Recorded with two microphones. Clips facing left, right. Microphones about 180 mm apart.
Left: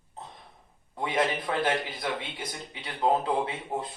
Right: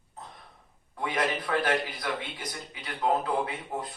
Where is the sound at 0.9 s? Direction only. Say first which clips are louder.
Left 2 dB; 25° left (ahead or behind).